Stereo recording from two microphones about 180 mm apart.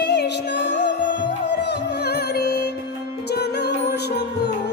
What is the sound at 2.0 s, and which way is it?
Music, 65° left (ahead or behind).